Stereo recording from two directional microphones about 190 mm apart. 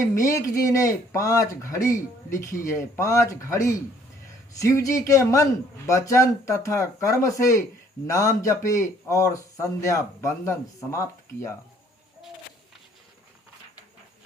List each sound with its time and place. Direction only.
0.1 s speech: 15° left (ahead or behind)